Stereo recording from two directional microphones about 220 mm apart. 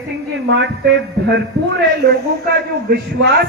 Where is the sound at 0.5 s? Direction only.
55° right (ahead or behind).